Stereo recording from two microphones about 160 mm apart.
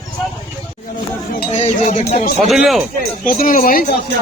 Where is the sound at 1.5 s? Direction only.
45° left (ahead or behind).